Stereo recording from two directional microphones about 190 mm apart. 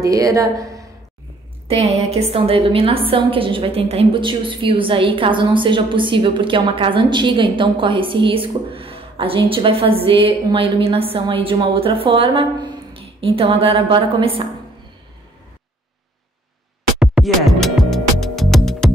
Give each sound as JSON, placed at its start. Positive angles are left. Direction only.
{"t": 0.0, "sound": "speech", "side_deg": -15}
{"t": 1.7, "sound": "a woman's voice", "side_deg": -35}
{"t": 17.0, "sound": "music", "side_deg": -5}